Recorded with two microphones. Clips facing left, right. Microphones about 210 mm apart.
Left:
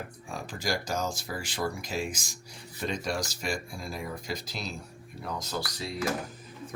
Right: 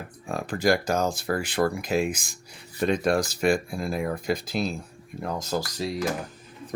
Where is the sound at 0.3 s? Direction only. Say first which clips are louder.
Right 10 dB; 55° right (ahead or behind).